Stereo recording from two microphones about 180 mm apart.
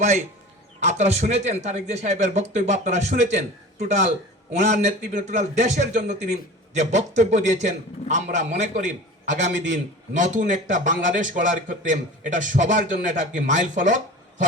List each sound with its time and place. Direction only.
0.9 s a man's voice: 35° right (ahead or behind)